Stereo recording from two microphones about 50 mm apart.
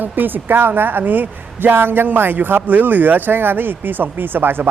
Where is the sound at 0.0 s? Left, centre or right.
Right.